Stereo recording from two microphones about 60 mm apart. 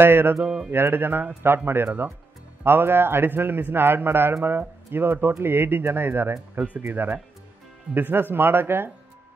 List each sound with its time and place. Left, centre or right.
0.0 s a man's voice: right
6.5 s speech: right
6.9 s a man's voice: right